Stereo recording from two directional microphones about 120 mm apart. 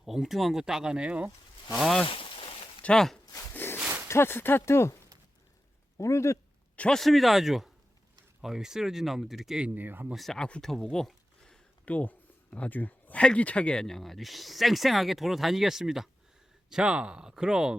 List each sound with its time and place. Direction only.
0.0 s speech: 5° right (ahead or behind)
1.7 s speech: 5° left (ahead or behind)
2.0 s a sound: 50° left (ahead or behind)
2.8 s speech: 5° left (ahead or behind)
3.3 s a sound: 20° left (ahead or behind)
3.8 s a sound: 15° right (ahead or behind)
4.1 s speech: 20° left (ahead or behind)
6.0 s speech: 25° left (ahead or behind)
6.7 s speech: 5° left (ahead or behind); by 10.2 s 15° right (ahead or behind)
10.2 s speech: 5° left (ahead or behind)